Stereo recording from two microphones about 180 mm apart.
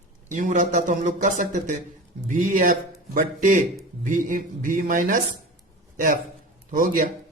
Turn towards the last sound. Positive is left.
turn(degrees=-50)  # may be behind; listen again after turning